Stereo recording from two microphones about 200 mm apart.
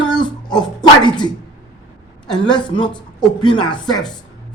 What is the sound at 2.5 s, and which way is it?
A woman's voice, 20° left (ahead or behind).